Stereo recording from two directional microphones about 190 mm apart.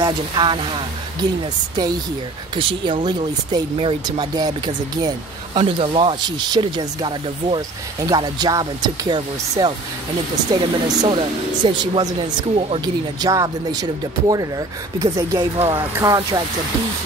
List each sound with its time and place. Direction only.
0.0 s speech: 25° right (ahead or behind)
2.5 s speech: 25° right (ahead or behind)